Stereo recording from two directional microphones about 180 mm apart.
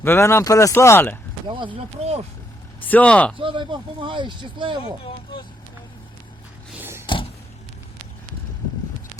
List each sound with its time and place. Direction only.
0.0 s speech: 15° left (ahead or behind)
1.5 s speech: 25° right (ahead or behind)
2.8 s speech: 10° left (ahead or behind)
3.3 s speech: 30° right (ahead or behind)
6.7 s a sound: 15° right (ahead or behind)